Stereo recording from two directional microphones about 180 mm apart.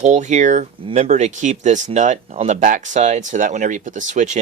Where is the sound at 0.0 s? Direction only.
40° right (ahead or behind).